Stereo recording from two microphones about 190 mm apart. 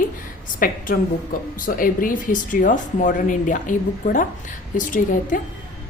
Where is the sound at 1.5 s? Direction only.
45° left (ahead or behind).